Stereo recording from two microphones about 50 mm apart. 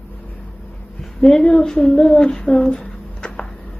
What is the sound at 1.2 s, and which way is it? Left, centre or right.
Speech, centre.